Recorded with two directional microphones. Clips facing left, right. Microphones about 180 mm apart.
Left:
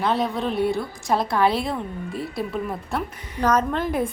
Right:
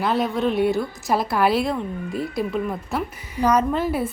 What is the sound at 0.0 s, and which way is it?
A woman's voice, centre (ahead or behind).